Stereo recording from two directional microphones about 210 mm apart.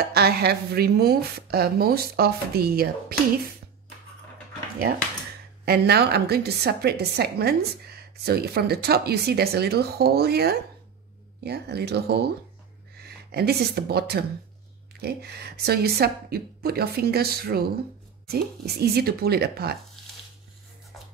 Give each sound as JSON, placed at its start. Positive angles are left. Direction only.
{"t": 0.0, "sound": "a woman's voice", "side_deg": -50}
{"t": 5.7, "sound": "a woman's voice", "side_deg": -50}